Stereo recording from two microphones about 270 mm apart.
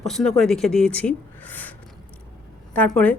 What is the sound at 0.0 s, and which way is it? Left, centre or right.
Speech, centre.